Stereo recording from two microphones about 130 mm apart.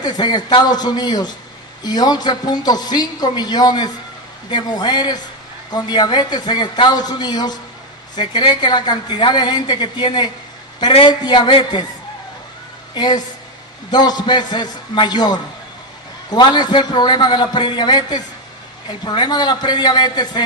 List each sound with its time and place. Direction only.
0.0 s a man's voice: 35° left (ahead or behind)
12.9 s a man's voice: 35° left (ahead or behind)